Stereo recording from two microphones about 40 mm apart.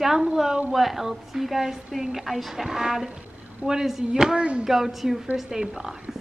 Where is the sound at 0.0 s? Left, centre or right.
Centre.